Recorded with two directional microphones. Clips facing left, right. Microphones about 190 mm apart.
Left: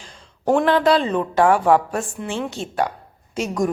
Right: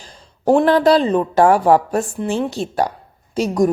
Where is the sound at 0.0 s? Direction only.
35° right (ahead or behind).